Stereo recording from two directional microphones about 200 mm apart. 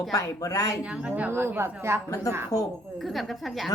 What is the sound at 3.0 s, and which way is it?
Speech, centre (ahead or behind).